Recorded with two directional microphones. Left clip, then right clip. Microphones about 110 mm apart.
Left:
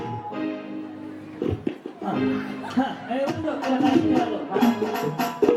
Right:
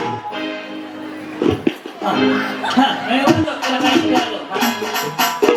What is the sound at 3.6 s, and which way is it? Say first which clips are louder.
Music: right 6 dB; 15° right (ahead or behind).